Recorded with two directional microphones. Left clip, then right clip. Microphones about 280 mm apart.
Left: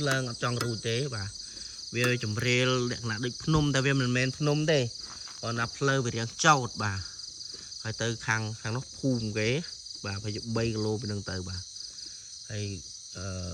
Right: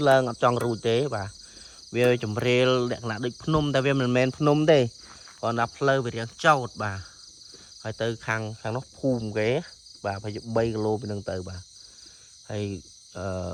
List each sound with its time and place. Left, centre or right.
0.0 s speech: centre
5.4 s cricket: centre
9.3 s speech: centre
10.8 s cricket: right
12.5 s cricket: centre